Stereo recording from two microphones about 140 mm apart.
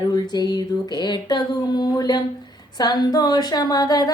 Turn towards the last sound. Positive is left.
turn(degrees=30)  # may be behind; listen again after turning